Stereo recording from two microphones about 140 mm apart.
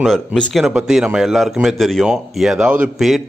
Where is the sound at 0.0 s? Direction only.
5° left (ahead or behind).